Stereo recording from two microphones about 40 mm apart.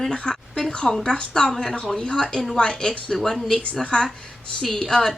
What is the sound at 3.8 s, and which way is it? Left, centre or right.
A woman's voice, left.